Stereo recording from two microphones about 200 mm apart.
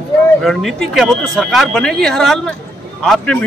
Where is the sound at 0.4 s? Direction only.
Centre (ahead or behind).